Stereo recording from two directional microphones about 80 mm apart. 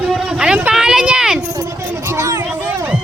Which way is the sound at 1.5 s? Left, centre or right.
Right.